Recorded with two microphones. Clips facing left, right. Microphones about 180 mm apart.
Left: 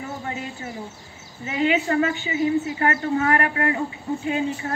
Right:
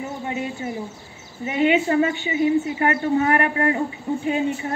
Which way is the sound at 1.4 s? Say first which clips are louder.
Right 3 dB; 25° right (ahead or behind).